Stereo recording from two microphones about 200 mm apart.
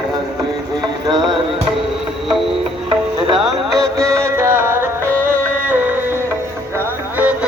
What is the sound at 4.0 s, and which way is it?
Music, 15° right (ahead or behind).